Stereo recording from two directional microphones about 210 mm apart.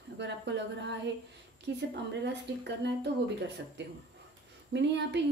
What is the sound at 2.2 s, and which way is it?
A woman's voice, 55° right (ahead or behind).